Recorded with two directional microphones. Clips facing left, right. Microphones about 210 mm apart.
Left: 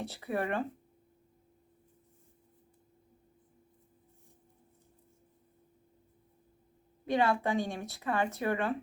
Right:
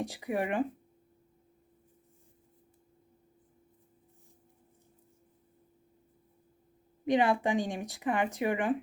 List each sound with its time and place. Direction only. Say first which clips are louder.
0.0 s speech: right 2 dB; 15° right (ahead or behind)
7.0 s speech: right 2 dB; 15° right (ahead or behind)